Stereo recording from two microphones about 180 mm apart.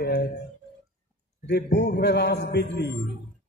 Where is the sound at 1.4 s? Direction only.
70° left (ahead or behind).